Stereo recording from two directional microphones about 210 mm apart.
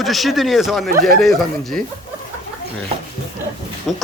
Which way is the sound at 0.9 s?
45° right (ahead or behind).